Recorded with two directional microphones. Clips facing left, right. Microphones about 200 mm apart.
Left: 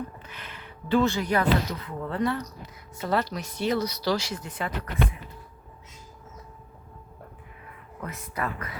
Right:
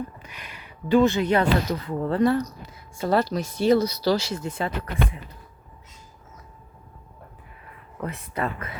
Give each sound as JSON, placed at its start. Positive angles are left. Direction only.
{"t": 0.2, "sound": "speech", "side_deg": -15}
{"t": 8.0, "sound": "speech", "side_deg": -30}